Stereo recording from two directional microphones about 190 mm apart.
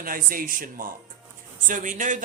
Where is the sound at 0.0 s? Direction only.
50° right (ahead or behind).